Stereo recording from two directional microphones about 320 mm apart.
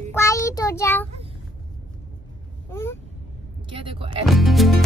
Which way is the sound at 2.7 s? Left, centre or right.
Centre.